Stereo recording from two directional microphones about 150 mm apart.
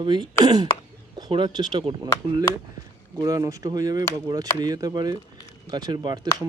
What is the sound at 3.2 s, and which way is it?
Speech, 25° right (ahead or behind).